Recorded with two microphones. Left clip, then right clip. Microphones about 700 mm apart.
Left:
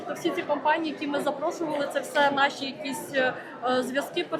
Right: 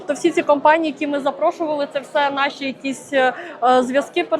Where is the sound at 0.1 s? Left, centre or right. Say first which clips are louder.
Right 11 dB; right.